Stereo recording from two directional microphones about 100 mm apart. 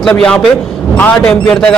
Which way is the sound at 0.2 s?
10° left (ahead or behind).